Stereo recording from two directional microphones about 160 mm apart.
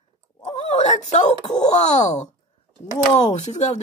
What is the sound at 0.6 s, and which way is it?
Wail, 45° left (ahead or behind).